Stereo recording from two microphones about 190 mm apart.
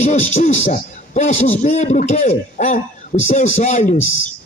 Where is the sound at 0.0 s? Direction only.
40° left (ahead or behind).